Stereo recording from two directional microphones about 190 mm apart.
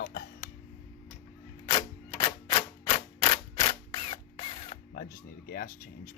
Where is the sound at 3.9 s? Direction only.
30° left (ahead or behind).